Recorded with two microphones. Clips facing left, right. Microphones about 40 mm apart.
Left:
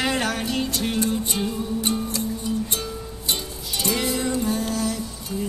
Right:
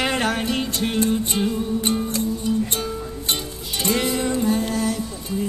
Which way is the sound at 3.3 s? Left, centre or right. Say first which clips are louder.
Even; right.